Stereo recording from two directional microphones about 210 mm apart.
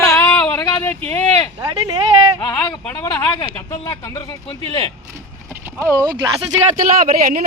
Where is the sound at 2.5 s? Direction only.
20° left (ahead or behind).